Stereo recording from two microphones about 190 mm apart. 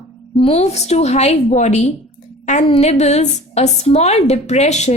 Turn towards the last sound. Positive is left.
turn(degrees=35)  # may be behind; listen again after turning